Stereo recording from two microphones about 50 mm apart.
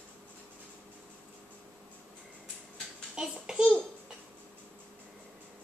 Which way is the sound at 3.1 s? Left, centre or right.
Centre.